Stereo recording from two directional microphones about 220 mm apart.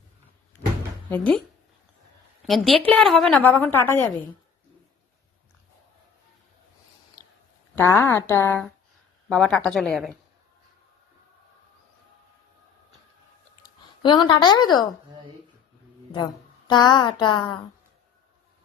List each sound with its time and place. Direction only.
1.1 s speech: 5° left (ahead or behind)
2.4 s a woman's voice: centre (ahead or behind)
7.8 s a woman's voice: 10° left (ahead or behind)
13.6 s speech: 20° left (ahead or behind)
16.1 s a woman's voice: 20° left (ahead or behind)